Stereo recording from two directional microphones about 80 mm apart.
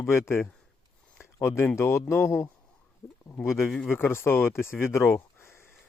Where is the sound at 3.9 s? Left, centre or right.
Left.